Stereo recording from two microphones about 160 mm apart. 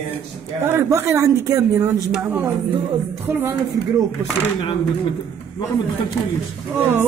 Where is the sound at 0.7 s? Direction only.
15° right (ahead or behind).